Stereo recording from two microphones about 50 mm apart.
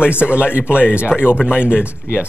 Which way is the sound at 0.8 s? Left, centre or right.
Left.